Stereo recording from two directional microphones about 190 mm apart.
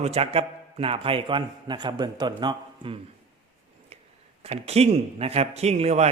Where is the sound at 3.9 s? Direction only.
35° right (ahead or behind).